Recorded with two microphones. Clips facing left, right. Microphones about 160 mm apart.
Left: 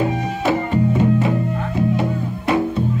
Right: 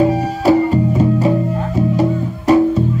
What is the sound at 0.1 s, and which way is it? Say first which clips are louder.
Music: right 7 dB; 35° right (ahead or behind).